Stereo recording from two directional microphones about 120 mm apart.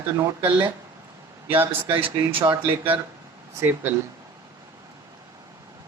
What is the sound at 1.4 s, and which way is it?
Speech, 15° right (ahead or behind).